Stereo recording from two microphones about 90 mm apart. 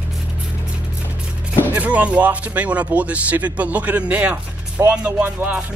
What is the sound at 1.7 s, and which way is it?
Speech, 15° right (ahead or behind).